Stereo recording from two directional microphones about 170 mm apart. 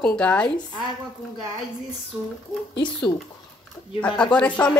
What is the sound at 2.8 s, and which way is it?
Speech, 25° left (ahead or behind).